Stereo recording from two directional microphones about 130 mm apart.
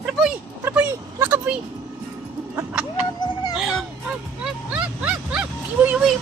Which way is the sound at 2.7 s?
10° right (ahead or behind).